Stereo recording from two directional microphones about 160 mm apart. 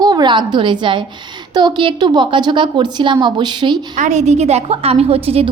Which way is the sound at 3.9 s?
45° right (ahead or behind).